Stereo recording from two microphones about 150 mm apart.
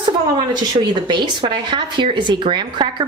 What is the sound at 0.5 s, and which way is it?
Speech, 30° right (ahead or behind).